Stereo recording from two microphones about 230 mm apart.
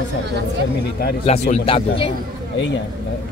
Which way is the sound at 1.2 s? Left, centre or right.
Left.